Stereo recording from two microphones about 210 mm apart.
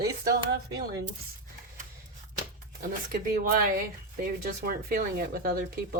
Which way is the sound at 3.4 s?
40° right (ahead or behind).